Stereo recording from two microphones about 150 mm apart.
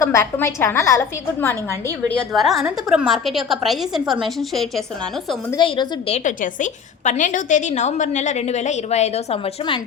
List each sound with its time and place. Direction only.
0.0 s a woman's voice: 20° left (ahead or behind)
2.0 s a woman's voice: 5° left (ahead or behind)
5.5 s a woman's voice: 30° left (ahead or behind)
6.1 s a woman's voice: 55° left (ahead or behind); by 9.8 s 35° left (ahead or behind)